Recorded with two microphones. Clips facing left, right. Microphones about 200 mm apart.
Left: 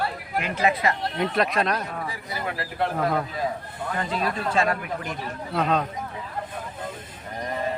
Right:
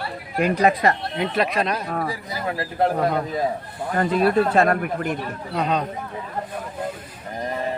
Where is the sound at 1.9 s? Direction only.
40° right (ahead or behind).